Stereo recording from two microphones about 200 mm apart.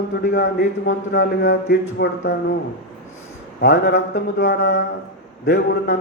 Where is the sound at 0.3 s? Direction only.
60° left (ahead or behind).